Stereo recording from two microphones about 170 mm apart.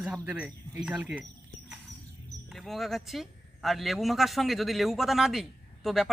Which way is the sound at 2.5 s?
Centre (ahead or behind).